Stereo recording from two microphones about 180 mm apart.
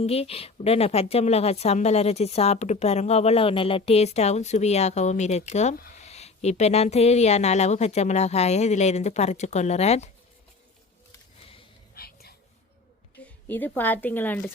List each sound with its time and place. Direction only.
0.0 s a woman's voice: 35° left (ahead or behind)
11.9 s whispering: 60° left (ahead or behind)
13.2 s a woman's voice: 10° left (ahead or behind)